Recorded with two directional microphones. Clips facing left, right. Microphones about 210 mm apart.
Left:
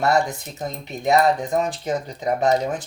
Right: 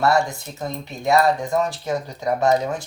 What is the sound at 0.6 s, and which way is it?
Speech, 20° left (ahead or behind).